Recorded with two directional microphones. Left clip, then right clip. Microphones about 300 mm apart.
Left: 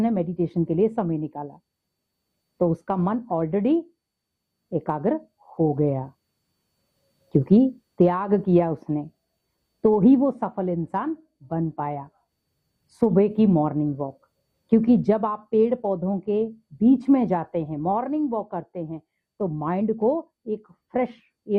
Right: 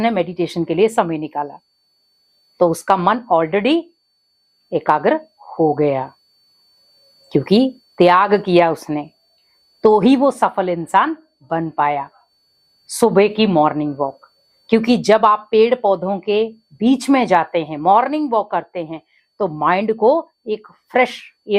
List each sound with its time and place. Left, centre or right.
0.0 s a woman's voice: centre
5.4 s a sound: centre
5.8 s a woman's voice: centre
7.3 s a woman's voice: centre
14.7 s a woman's voice: centre
15.8 s speech: right
16.0 s a woman's voice: centre
20.0 s speech: right
20.5 s a woman's voice: centre